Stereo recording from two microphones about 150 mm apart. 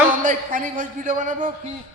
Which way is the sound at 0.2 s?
60° right (ahead or behind).